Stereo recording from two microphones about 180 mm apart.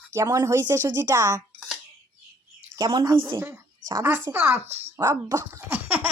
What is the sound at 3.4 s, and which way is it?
A woman's voice, 15° right (ahead or behind).